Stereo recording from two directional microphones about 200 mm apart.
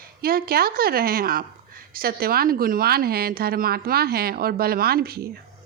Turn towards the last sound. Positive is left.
turn(degrees=-50)  # may be behind; listen again after turning